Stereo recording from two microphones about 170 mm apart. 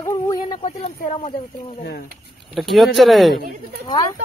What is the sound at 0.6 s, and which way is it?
Speech, 40° left (ahead or behind).